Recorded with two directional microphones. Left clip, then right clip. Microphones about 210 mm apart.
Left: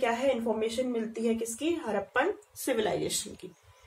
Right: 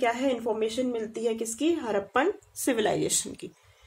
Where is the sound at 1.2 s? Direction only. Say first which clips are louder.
Right 4 dB; 50° right (ahead or behind).